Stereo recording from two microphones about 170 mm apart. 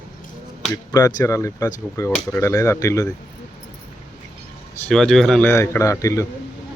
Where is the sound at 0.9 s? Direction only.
20° left (ahead or behind).